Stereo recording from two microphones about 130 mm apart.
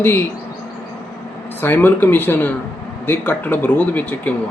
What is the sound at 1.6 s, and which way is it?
A man's voice, 15° left (ahead or behind).